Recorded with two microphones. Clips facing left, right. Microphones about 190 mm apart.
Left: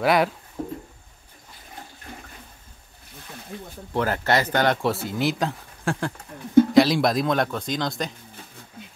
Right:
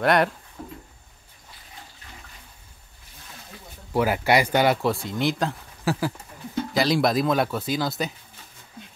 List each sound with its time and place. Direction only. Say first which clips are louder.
0.0 s speech: even; centre (ahead or behind)
0.6 s a sound: left 8 dB; 35° left (ahead or behind)
3.9 s speech: right 2 dB; 10° right (ahead or behind)
4.8 s speech: even; centre (ahead or behind)